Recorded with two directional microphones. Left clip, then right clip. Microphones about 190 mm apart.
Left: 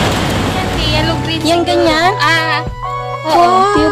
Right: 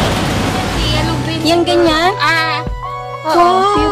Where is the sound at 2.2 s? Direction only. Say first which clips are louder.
Left 1 dB; 35° left (ahead or behind).